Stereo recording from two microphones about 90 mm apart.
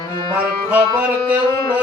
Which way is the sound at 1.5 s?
35° left (ahead or behind).